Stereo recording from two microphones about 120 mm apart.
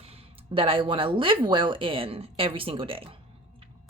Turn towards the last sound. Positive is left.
turn(degrees=-50)  # may be behind; listen again after turning